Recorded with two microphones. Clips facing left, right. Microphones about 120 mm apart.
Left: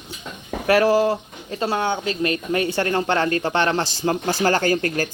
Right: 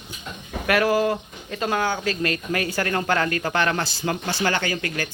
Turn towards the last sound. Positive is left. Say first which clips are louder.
# left 6 dB
turn(degrees=40)  # may be behind; listen again after turning